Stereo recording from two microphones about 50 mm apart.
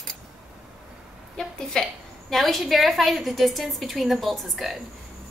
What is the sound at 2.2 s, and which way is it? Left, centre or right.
A woman's voice, centre.